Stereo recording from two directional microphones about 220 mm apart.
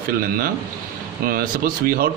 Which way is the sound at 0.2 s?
40° right (ahead or behind).